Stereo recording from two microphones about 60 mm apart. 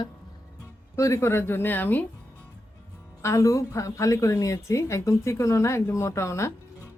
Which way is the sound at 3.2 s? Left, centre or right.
Left.